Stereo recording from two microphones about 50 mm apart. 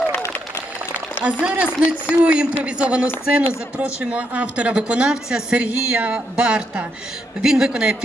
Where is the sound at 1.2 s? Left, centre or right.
Right.